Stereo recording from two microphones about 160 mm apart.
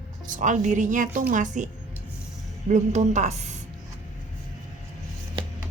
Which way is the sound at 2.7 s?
45° right (ahead or behind).